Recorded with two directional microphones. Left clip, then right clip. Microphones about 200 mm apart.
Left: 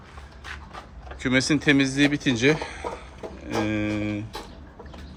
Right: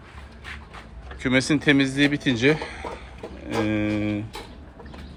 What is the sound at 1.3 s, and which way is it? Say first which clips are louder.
Speech: right 1 dB; 10° left (ahead or behind).